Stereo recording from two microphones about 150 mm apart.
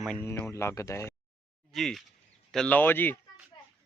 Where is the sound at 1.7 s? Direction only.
Centre (ahead or behind).